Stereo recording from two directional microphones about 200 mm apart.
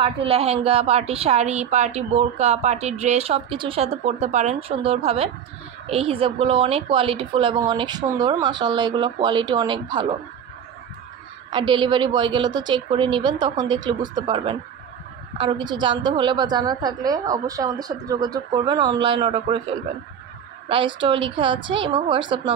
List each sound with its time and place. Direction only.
0.0 s a woman's voice: 30° right (ahead or behind)
11.5 s a woman's voice: 25° right (ahead or behind)
20.6 s a woman's voice: 25° right (ahead or behind)